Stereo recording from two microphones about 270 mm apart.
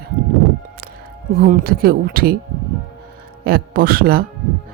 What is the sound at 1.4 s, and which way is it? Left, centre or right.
Speech, right.